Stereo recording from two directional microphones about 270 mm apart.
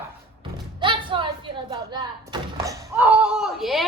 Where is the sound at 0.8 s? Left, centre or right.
Centre.